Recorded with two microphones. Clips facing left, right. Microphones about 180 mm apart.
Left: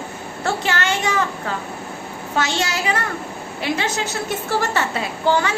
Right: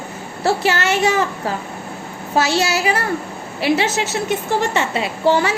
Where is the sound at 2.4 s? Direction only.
30° right (ahead or behind).